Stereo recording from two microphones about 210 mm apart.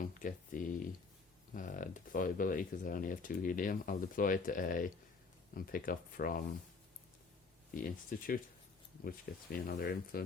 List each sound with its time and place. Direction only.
0.0 s a sound: 40° left (ahead or behind)
1.5 s speech: 40° left (ahead or behind)
7.7 s speech: 40° left (ahead or behind)